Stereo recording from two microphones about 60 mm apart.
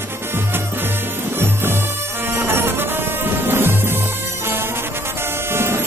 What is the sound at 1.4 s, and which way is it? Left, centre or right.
Music, right.